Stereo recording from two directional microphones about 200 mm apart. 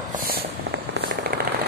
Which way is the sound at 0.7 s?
50° right (ahead or behind).